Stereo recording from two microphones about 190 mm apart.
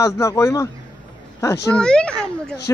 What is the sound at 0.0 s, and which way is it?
Speech, 15° left (ahead or behind).